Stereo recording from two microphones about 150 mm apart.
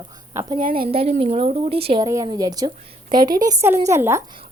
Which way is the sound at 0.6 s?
70° right (ahead or behind).